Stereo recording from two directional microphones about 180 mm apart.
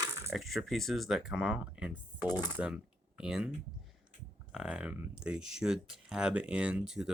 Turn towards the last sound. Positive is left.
turn(degrees=-5)  # may be behind; listen again after turning